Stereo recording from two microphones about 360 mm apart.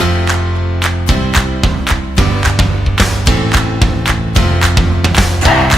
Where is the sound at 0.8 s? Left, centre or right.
Centre.